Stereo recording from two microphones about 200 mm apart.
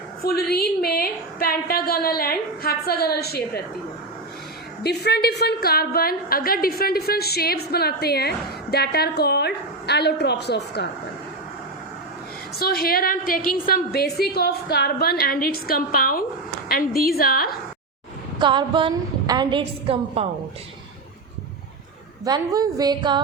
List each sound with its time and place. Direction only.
0.2 s a woman's voice: 50° left (ahead or behind)
4.8 s a woman's voice: 55° left (ahead or behind)
12.5 s a woman's voice: 50° left (ahead or behind)
18.3 s a woman's voice: 25° right (ahead or behind)
22.2 s a woman's voice: 20° right (ahead or behind)